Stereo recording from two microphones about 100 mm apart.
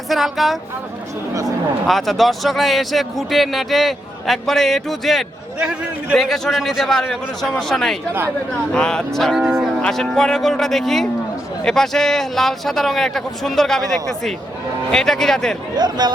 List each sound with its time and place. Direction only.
0.1 s speech: centre (ahead or behind)
1.3 s speech: 35° right (ahead or behind)
1.9 s speech: centre (ahead or behind)
5.5 s a man's voice: 10° right (ahead or behind)
6.1 s speech: 5° left (ahead or behind)
15.7 s speech: 45° right (ahead or behind)